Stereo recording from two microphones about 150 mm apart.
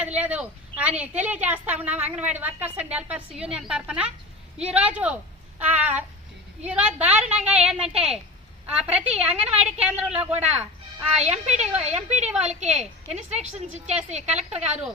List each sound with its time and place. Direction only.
0.0 s a woman's voice: 10° right (ahead or behind)
11.2 s a woman's voice: 45° right (ahead or behind)